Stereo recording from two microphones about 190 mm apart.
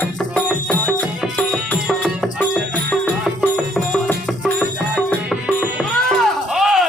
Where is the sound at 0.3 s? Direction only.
5° left (ahead or behind).